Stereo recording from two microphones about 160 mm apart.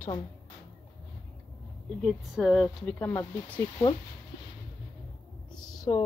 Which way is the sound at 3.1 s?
20° left (ahead or behind).